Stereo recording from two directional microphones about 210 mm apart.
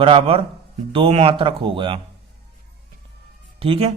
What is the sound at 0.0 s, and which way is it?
A man's voice, 25° right (ahead or behind).